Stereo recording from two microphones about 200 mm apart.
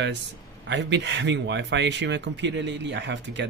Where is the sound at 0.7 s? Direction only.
60° right (ahead or behind).